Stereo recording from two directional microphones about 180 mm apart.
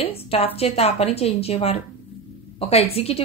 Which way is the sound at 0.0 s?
35° left (ahead or behind).